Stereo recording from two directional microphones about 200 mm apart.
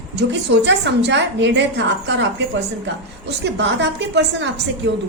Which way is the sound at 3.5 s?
60° right (ahead or behind).